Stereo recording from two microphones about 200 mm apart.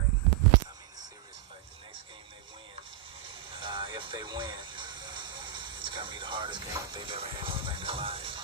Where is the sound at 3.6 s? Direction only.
25° right (ahead or behind).